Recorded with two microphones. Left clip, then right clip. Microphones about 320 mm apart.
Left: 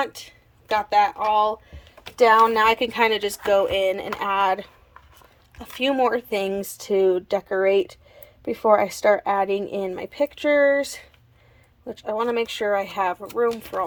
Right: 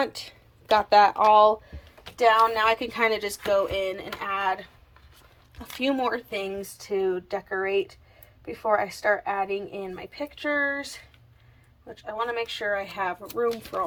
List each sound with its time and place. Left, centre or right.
0.0 s speech: centre
2.1 s a woman's voice: centre